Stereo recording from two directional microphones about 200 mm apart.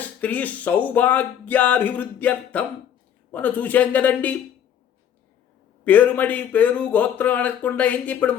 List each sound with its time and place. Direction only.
0.0 s speech: 10° left (ahead or behind)
5.8 s speech: 10° left (ahead or behind)